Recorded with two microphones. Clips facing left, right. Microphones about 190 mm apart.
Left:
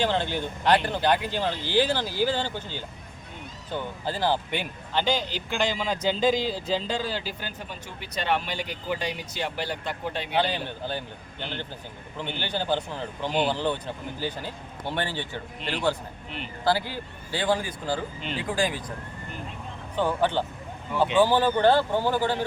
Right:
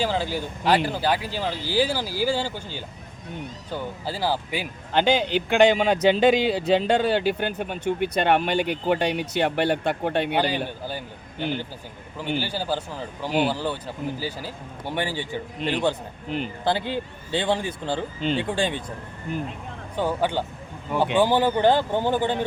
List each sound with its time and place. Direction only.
0.0 s speech: 5° right (ahead or behind)
4.0 s speech: 10° right (ahead or behind)
4.9 s speech: 55° right (ahead or behind)
10.3 s speech: 10° right (ahead or behind)
12.1 s speech: 10° right (ahead or behind); by 18.8 s 30° right (ahead or behind)
20.0 s speech: 10° right (ahead or behind)